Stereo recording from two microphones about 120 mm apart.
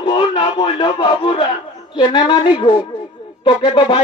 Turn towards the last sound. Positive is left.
turn(degrees=45)  # may be behind; listen again after turning